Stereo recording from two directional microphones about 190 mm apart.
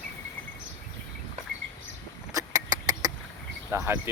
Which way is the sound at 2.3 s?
20° right (ahead or behind).